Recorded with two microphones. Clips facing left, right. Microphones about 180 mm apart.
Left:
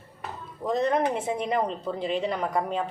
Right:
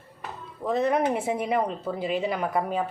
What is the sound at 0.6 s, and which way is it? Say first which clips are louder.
Speech: right 1 dB; 5° right (ahead or behind).